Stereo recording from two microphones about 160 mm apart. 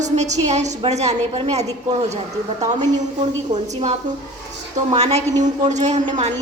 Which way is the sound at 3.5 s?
45° right (ahead or behind).